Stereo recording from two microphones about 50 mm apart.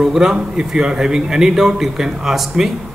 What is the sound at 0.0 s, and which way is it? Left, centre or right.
A man's voice, centre.